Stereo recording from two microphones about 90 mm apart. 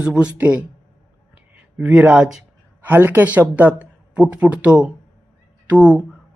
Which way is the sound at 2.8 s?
20° right (ahead or behind).